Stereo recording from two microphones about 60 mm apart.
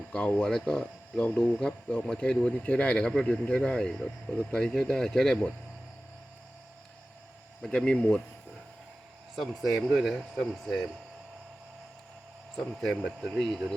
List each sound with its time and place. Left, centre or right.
0.3 s speech: centre
7.6 s speech: centre
9.3 s speech: centre
12.5 s speech: centre